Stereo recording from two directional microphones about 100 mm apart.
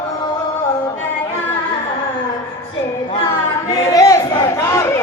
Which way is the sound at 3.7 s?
35° left (ahead or behind).